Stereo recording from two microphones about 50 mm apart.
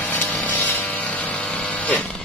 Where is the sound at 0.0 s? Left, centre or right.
Left.